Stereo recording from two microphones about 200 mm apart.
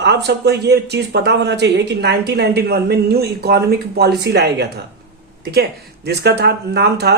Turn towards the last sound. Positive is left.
turn(degrees=-55)  # may be behind; listen again after turning